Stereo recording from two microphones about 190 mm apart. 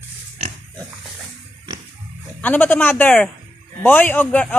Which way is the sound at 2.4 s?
10° left (ahead or behind).